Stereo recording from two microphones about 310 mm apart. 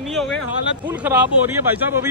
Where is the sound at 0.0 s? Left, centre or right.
Centre.